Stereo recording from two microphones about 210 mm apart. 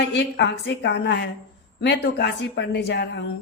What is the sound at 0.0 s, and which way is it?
Speech, 55° left (ahead or behind).